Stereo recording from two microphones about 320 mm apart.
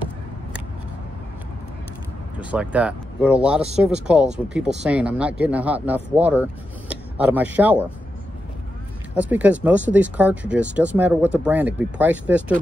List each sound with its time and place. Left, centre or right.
2.3 s speech: centre
9.1 s speech: centre